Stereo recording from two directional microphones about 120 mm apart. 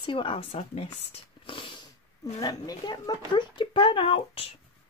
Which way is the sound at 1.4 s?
45° left (ahead or behind).